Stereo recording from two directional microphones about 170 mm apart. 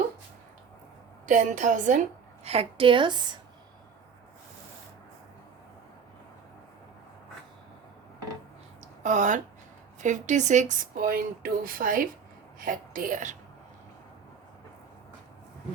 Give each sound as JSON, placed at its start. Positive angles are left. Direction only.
{"t": 1.3, "sound": "a woman's voice", "side_deg": -45}
{"t": 9.0, "sound": "speech", "side_deg": -45}